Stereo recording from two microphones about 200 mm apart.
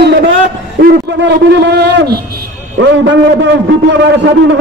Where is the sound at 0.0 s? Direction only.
55° right (ahead or behind).